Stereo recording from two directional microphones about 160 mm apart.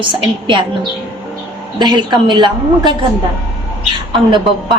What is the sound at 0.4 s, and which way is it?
A woman's voice, 30° right (ahead or behind).